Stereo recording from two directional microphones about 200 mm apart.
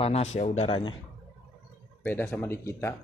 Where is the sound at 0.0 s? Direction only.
30° left (ahead or behind).